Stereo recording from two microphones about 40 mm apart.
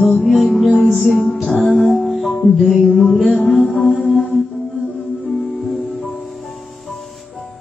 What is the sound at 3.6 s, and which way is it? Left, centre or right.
Music, left.